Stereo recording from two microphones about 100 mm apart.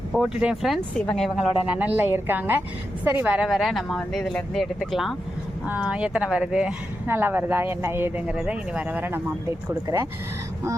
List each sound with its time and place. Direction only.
0.1 s speech: 5° right (ahead or behind)
1.6 s speech: 15° right (ahead or behind)
3.4 s speech: centre (ahead or behind)
5.6 s speech: 15° right (ahead or behind)
7.1 s speech: 20° right (ahead or behind)
8.3 s speech: 10° right (ahead or behind)
9.6 s speech: 30° right (ahead or behind)